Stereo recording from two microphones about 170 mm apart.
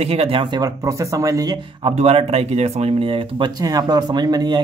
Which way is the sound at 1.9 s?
35° right (ahead or behind).